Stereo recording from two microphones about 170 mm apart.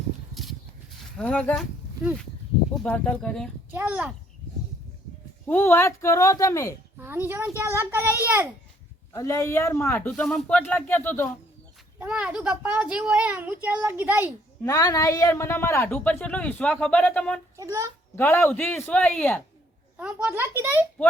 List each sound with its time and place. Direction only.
1.1 s speech: 5° left (ahead or behind)
2.7 s speech: 5° left (ahead or behind)
3.7 s a child's voice: 10° right (ahead or behind)
5.5 s speech: 10° left (ahead or behind)
7.0 s a child's voice: 15° right (ahead or behind)
9.1 s speech: 20° left (ahead or behind)
10.1 s speech: 5° left (ahead or behind)
11.9 s a child's voice: 5° right (ahead or behind)
14.6 s speech: 20° left (ahead or behind)
17.6 s a child's voice: 20° right (ahead or behind)
18.2 s speech: 15° left (ahead or behind)
20.0 s a child's voice: 10° right (ahead or behind)